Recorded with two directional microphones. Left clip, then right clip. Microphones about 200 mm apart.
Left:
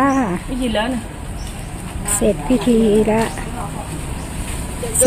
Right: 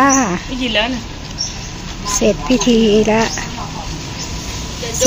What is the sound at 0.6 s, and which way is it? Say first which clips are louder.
Speech: right 4 dB; 55° left (ahead or behind).